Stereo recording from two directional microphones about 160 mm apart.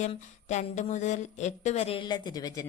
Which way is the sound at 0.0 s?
45° left (ahead or behind).